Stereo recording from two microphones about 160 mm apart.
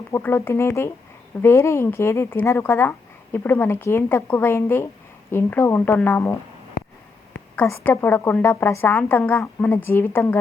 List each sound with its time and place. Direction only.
0.1 s a woman's voice: 15° left (ahead or behind)
7.5 s a woman's voice: 15° left (ahead or behind)